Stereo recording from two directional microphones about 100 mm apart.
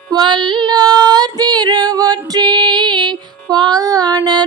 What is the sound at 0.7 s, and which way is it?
Female singing, 45° right (ahead or behind).